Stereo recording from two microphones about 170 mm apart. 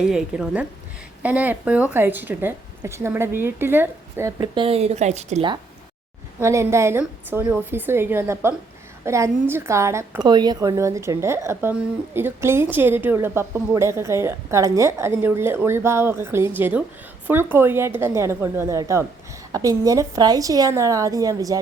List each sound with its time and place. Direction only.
0.0 s a woman's voice: centre (ahead or behind); by 4.6 s 20° right (ahead or behind)
4.6 s speech: 35° right (ahead or behind)
6.4 s a woman's voice: 15° right (ahead or behind)